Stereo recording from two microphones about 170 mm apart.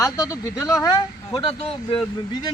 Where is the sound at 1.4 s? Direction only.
35° left (ahead or behind).